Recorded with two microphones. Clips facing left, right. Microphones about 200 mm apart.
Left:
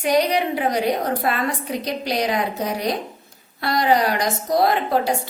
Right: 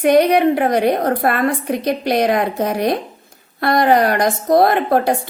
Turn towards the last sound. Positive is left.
turn(degrees=-55)  # may be behind; listen again after turning